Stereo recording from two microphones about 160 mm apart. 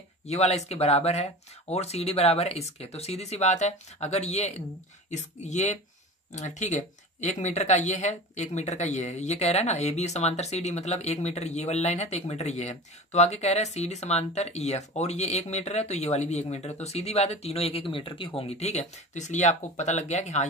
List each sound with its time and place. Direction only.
0.3 s speech: 45° left (ahead or behind)